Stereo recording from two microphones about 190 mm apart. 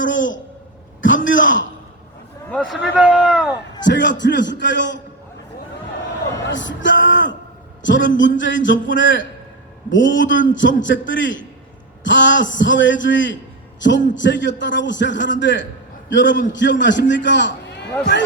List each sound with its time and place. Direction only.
0.0 s speech: 80° left
2.5 s speech: 5° left (ahead or behind)
3.0 s speech: 5° right (ahead or behind)
3.8 s a man's voice: 70° left (ahead or behind)
6.5 s a man's voice: 75° left (ahead or behind)